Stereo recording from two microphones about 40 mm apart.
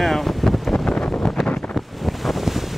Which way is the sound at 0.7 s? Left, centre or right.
Left.